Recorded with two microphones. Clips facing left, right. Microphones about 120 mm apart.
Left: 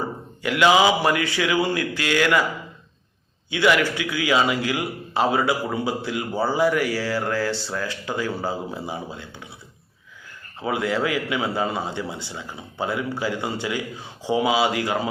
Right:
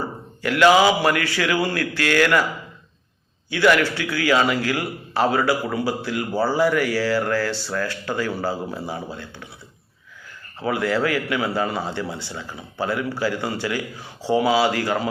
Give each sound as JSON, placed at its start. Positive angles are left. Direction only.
{"t": 0.4, "sound": "a man's voice", "side_deg": 20}
{"t": 3.5, "sound": "a man's voice", "side_deg": 15}
{"t": 10.6, "sound": "a man's voice", "side_deg": 20}